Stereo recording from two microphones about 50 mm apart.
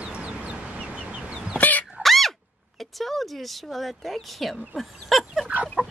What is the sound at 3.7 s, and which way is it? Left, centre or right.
Speech, centre.